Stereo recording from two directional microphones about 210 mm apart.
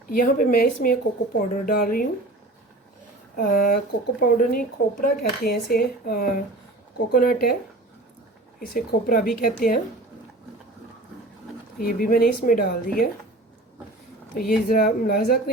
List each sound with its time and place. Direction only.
0.1 s speech: 40° left (ahead or behind)
3.3 s speech: 45° left (ahead or behind)
8.6 s speech: 45° left (ahead or behind)
11.8 s speech: 40° left (ahead or behind)
14.3 s speech: 45° left (ahead or behind)